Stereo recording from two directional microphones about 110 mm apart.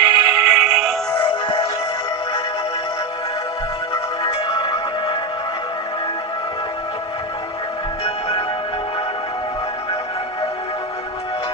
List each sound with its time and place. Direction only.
0.0 s synthetic singing: 45° left (ahead or behind)
0.3 s synthetic singing: 5° right (ahead or behind)
4.4 s music: 50° left (ahead or behind)
8.0 s music: 65° left (ahead or behind)